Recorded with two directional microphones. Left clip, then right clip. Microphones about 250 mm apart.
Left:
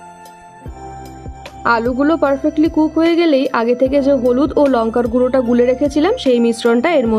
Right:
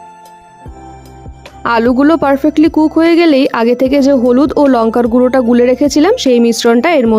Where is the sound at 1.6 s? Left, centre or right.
Right.